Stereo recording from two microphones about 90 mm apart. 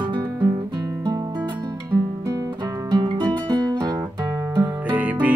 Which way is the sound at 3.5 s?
50° right (ahead or behind).